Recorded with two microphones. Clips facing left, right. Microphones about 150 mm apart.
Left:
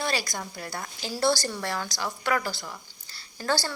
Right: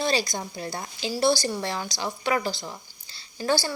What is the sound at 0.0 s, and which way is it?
A woman's voice, 20° right (ahead or behind).